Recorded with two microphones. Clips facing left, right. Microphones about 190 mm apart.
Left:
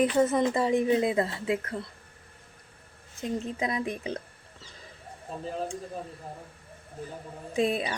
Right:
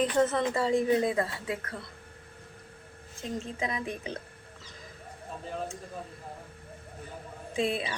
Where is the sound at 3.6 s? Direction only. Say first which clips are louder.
Left 3 dB; 35° left (ahead or behind).